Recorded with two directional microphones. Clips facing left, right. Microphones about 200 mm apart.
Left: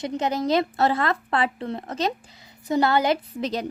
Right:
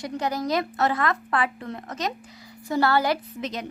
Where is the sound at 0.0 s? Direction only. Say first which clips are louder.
Left 3 dB; 25° left (ahead or behind).